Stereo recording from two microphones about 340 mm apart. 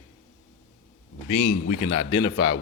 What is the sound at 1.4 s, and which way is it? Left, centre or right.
Speech, left.